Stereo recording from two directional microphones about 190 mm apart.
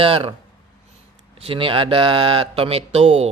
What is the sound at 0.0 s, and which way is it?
Speech, 30° right (ahead or behind).